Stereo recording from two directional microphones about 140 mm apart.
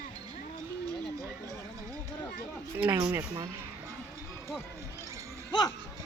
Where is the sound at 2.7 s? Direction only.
10° right (ahead or behind).